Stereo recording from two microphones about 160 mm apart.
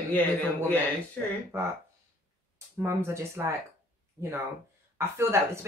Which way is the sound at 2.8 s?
15° right (ahead or behind).